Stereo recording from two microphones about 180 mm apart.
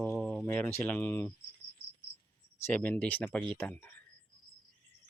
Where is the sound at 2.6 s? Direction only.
10° left (ahead or behind).